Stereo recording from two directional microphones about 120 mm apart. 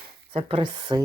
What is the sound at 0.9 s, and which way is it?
Speech, 35° right (ahead or behind).